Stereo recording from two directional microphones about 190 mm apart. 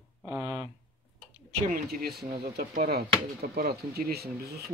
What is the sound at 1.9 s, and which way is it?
Speech, 55° right (ahead or behind).